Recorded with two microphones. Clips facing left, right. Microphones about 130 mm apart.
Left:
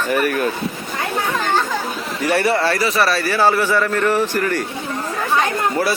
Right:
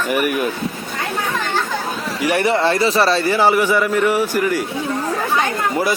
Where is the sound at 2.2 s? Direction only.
15° right (ahead or behind).